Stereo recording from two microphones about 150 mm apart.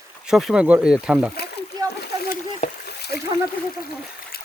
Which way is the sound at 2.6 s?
90° left.